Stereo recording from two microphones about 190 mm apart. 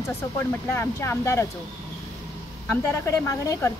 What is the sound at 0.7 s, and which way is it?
Speech, 10° left (ahead or behind).